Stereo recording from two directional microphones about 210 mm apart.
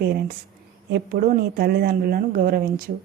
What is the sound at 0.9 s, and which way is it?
Speech, 50° right (ahead or behind).